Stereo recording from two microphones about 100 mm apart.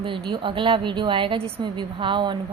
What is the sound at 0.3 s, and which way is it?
A woman's voice, 55° right (ahead or behind).